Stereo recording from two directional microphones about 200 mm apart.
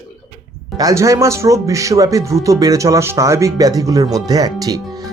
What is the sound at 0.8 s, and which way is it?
Speech, 15° right (ahead or behind).